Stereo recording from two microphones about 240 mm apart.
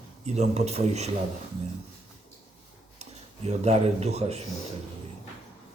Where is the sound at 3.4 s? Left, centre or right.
Right.